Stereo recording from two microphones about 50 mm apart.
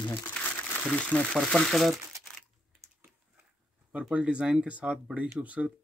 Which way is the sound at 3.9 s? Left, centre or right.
Right.